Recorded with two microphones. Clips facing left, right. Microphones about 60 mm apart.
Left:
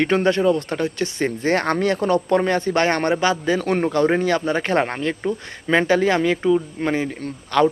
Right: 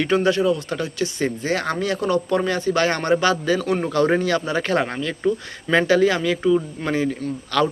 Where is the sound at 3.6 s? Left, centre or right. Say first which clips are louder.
Left 1 dB; left.